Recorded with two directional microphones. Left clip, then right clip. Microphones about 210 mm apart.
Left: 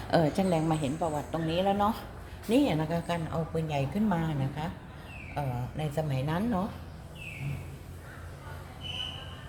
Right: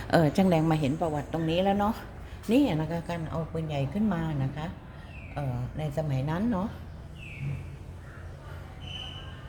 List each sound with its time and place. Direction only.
0.1 s a woman's voice: 20° right (ahead or behind)